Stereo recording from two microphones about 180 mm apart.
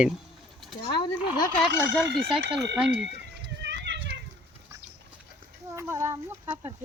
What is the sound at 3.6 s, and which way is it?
Children playing, 75° right (ahead or behind).